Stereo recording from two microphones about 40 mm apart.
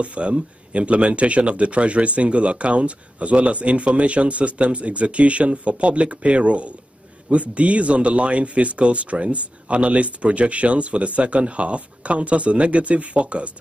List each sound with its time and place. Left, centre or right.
0.0 s speech: right